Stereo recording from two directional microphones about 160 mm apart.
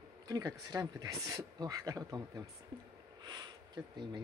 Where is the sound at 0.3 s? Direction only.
20° right (ahead or behind).